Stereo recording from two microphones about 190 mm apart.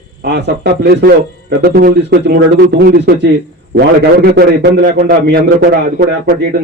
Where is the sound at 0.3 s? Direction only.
60° right (ahead or behind).